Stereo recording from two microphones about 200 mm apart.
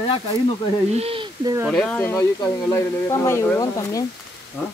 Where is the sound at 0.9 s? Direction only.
30° right (ahead or behind).